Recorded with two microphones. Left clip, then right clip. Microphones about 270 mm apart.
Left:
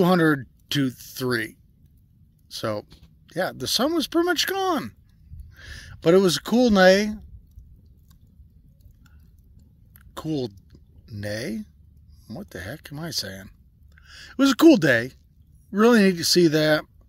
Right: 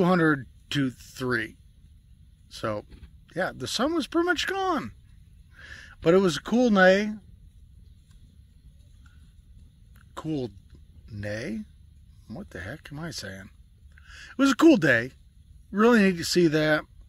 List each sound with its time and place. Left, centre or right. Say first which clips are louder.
0.0 s speech: left 3 dB; centre
9.9 s a sound: left 3 dB; centre
12.3 s speech: left 3 dB; centre